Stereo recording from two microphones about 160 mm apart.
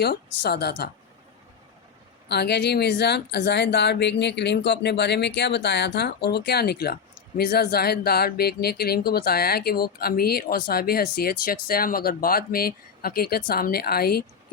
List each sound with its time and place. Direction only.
0.0 s a woman's voice: 90° left
2.2 s speech: 90° left; by 14.3 s 75° left (ahead or behind)